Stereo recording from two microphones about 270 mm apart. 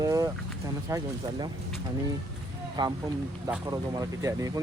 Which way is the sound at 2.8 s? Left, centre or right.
Centre.